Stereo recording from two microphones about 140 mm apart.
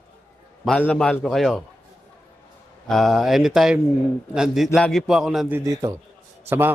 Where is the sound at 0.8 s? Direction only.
5° left (ahead or behind).